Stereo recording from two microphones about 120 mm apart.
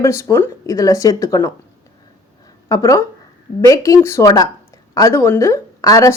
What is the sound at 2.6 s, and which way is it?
A woman's voice, 30° left (ahead or behind).